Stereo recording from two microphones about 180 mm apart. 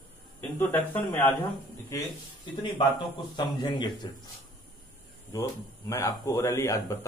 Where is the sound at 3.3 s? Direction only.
25° left (ahead or behind).